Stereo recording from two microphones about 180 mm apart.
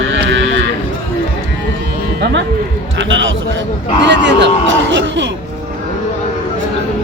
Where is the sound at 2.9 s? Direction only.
90° right.